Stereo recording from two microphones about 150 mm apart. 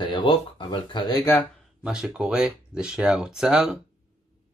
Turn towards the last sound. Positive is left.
turn(degrees=-5)  # may be behind; listen again after turning